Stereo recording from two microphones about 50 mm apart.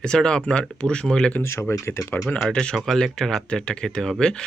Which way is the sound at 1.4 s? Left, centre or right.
Left.